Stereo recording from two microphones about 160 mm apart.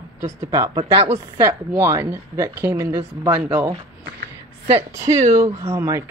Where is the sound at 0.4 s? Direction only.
20° right (ahead or behind).